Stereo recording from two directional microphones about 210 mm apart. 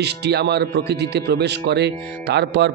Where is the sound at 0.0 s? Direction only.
50° right (ahead or behind).